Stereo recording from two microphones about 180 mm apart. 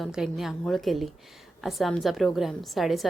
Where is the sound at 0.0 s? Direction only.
Centre (ahead or behind).